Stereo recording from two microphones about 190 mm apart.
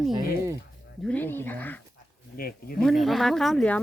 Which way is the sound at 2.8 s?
Centre (ahead or behind).